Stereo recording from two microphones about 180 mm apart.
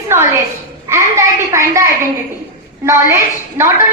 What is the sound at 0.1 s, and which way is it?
A woman's voice, 15° right (ahead or behind).